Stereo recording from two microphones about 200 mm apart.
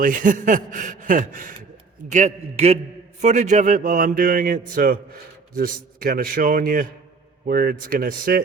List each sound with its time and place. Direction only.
0.0 s a man's voice: 45° right (ahead or behind)